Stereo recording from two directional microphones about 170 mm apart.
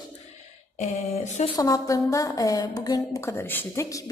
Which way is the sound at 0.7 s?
40° left (ahead or behind).